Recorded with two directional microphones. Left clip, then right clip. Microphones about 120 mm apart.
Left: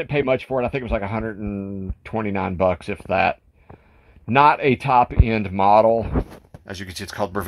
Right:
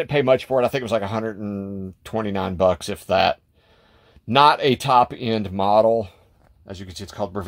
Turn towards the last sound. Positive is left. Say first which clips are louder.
# left 3 dB
turn(degrees=0)  # may be behind; listen again after turning